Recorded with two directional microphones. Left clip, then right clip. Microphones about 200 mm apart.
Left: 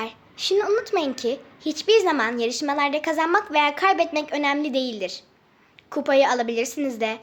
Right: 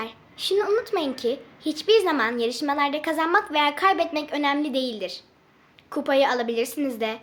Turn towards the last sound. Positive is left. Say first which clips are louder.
# left 1 dB
turn(degrees=10)  # may be behind; listen again after turning